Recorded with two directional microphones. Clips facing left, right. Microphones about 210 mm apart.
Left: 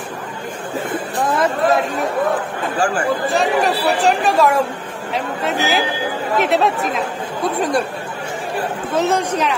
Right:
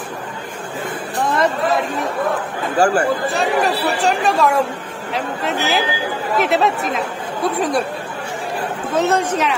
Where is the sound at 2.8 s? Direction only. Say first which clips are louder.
Right 5 dB; 40° right (ahead or behind).